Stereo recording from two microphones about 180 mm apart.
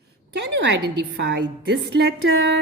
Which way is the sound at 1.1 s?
70° right (ahead or behind).